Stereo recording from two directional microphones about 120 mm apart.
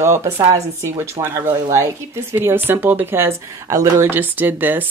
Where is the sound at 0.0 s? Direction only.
20° right (ahead or behind).